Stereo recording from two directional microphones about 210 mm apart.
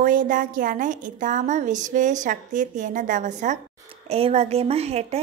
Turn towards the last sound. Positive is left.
turn(degrees=-30)  # may be behind; listen again after turning